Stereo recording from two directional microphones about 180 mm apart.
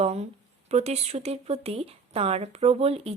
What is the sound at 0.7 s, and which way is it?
Speech, 35° right (ahead or behind).